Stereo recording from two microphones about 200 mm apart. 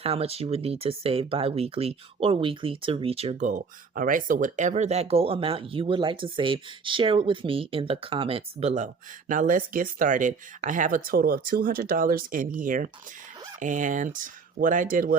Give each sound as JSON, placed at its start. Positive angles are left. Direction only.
{"t": 0.0, "sound": "speech", "side_deg": -30}